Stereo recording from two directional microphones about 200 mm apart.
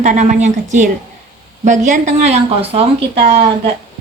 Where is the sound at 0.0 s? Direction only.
35° right (ahead or behind).